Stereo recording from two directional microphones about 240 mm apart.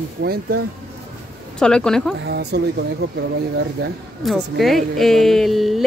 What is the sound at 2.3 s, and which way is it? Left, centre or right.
Speech, right.